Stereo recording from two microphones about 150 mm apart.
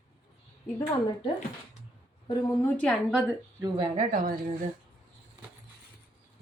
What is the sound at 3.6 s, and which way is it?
Speech, 30° right (ahead or behind).